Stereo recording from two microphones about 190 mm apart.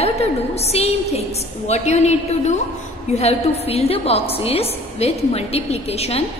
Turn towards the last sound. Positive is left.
turn(degrees=35)  # may be behind; listen again after turning